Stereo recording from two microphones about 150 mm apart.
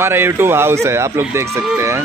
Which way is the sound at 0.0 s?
15° right (ahead or behind).